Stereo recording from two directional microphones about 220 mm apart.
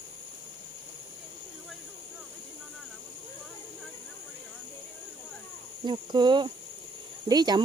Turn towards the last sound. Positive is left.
turn(degrees=-20)  # may be behind; listen again after turning